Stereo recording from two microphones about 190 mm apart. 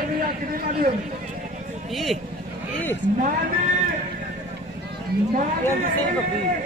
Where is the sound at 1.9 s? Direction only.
Centre (ahead or behind).